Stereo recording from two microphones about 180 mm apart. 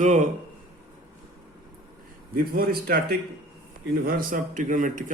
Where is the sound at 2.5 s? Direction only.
55° right (ahead or behind).